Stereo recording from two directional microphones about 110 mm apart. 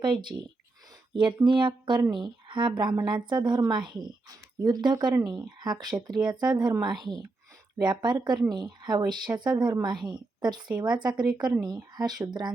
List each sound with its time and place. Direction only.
0.0 s speech: 45° right (ahead or behind)
1.5 s speech: 45° right (ahead or behind)